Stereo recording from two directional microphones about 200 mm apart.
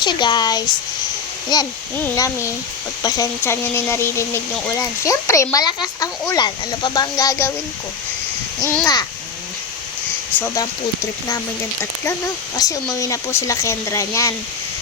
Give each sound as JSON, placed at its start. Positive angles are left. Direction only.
{"t": 0.0, "sound": "speech", "side_deg": 20}
{"t": 8.6, "sound": "speech", "side_deg": 15}
{"t": 10.3, "sound": "speech", "side_deg": 15}
{"t": 12.5, "sound": "speech", "side_deg": 15}